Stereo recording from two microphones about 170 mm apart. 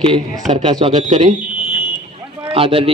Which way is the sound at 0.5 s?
30° right (ahead or behind).